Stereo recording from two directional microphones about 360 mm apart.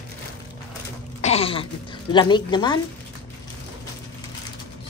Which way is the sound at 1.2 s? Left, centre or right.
Centre.